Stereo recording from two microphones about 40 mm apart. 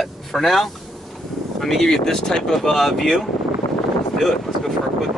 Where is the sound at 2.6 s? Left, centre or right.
Centre.